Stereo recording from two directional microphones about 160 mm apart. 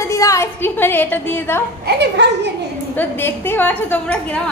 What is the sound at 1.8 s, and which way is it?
Speech, 90° right.